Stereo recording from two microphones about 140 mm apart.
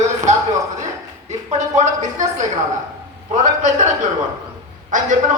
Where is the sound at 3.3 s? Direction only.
60° right (ahead or behind).